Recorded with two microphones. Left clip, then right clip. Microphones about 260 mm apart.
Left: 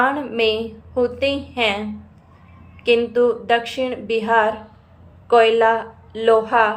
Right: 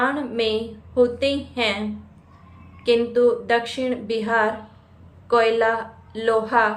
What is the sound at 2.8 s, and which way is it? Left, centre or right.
A woman's voice, centre.